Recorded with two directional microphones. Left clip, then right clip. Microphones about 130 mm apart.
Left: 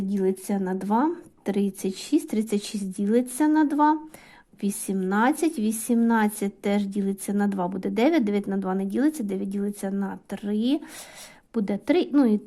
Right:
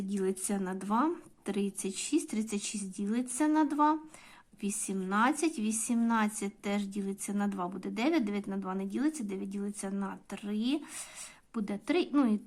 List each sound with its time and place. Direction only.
0.1 s a woman's voice: 25° left (ahead or behind)